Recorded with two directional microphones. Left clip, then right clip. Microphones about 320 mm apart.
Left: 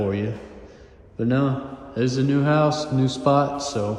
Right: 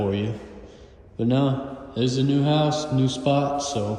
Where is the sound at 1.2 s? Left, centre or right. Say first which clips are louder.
Even; centre.